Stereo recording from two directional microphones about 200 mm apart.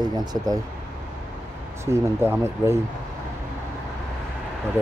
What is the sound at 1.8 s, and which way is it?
Speech, 10° right (ahead or behind).